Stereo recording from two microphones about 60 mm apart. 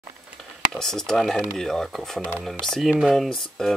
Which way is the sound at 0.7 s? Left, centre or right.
Centre.